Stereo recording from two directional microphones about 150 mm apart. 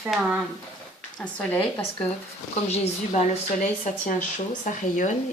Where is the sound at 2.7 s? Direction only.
50° left (ahead or behind).